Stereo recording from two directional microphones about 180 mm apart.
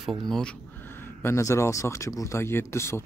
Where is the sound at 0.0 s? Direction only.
Centre (ahead or behind).